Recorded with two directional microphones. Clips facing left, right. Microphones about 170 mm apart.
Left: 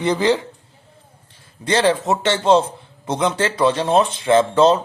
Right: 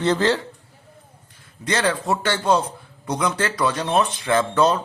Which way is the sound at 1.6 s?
30° left (ahead or behind).